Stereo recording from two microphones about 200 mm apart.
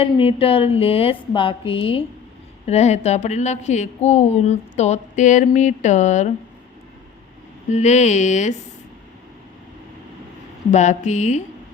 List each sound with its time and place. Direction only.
0.0 s a sound: 25° left (ahead or behind)
2.6 s a woman's voice: 35° left (ahead or behind)
7.7 s a woman's voice: 35° left (ahead or behind)
10.7 s a woman's voice: 35° left (ahead or behind)